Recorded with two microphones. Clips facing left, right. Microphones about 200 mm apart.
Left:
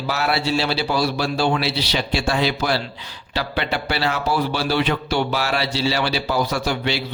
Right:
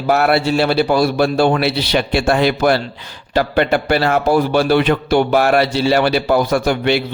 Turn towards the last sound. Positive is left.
turn(degrees=-55)  # may be behind; listen again after turning